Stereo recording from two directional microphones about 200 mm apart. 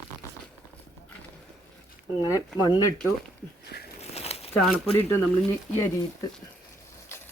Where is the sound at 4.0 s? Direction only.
30° left (ahead or behind).